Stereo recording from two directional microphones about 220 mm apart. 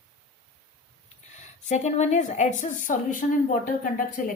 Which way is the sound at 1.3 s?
30° left (ahead or behind).